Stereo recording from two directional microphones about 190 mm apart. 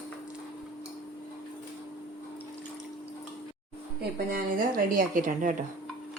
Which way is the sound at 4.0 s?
50° right (ahead or behind).